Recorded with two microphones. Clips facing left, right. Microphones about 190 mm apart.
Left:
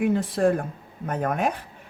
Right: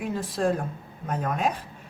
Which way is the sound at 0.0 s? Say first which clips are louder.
Left 5 dB; 60° left (ahead or behind).